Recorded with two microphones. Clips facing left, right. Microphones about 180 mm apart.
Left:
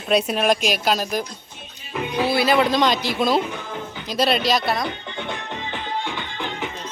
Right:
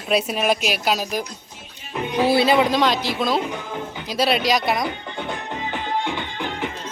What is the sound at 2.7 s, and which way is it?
Speech, 5° right (ahead or behind).